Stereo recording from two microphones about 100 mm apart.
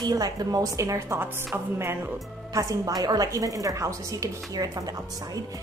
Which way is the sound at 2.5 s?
35° right (ahead or behind).